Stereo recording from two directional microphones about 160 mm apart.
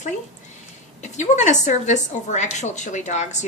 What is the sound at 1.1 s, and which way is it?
A woman's voice, 50° left (ahead or behind).